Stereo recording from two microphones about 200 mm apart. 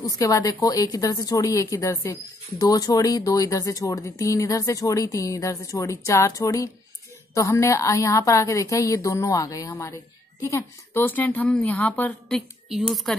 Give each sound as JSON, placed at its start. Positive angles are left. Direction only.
{"t": 0.0, "sound": "speech", "side_deg": 15}